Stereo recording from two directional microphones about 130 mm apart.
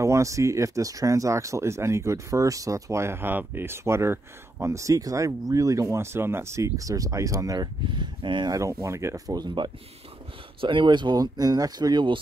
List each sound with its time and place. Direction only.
0.0 s speech: 25° right (ahead or behind)